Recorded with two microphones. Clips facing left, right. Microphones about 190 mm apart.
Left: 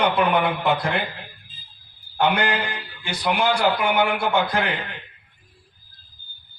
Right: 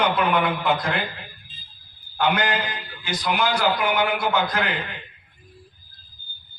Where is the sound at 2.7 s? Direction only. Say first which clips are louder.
Right 1 dB; 65° left (ahead or behind).